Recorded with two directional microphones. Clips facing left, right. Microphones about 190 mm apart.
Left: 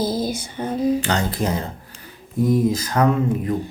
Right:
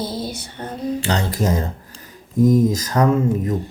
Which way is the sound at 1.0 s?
35° right (ahead or behind).